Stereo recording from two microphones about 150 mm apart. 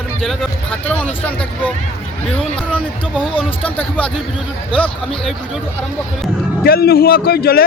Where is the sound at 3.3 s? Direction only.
40° left (ahead or behind).